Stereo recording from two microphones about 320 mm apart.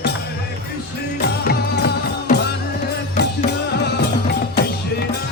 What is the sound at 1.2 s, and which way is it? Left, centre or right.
Music, left.